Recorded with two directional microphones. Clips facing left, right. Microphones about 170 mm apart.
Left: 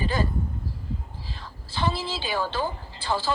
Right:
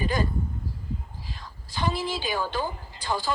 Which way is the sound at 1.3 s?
15° right (ahead or behind).